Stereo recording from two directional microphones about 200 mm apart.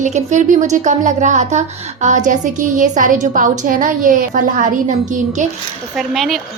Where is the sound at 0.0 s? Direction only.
35° right (ahead or behind).